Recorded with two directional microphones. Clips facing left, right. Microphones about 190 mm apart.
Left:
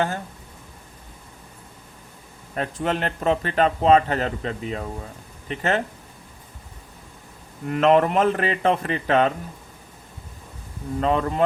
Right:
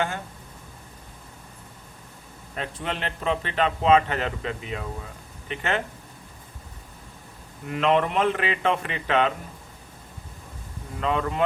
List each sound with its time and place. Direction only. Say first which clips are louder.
2.6 s a man's voice: left 6 dB; 45° left (ahead or behind)
7.7 s a man's voice: left 5 dB; 45° left (ahead or behind)
11.0 s speech: left 3 dB; 40° left (ahead or behind)